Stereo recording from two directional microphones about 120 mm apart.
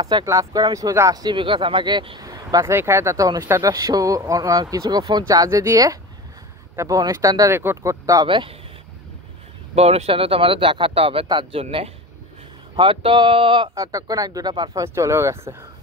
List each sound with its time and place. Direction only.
0.2 s speech: 25° right (ahead or behind)
8.3 s speech: 45° right (ahead or behind)
9.8 s speech: 60° right (ahead or behind)
13.7 s speech: 30° right (ahead or behind)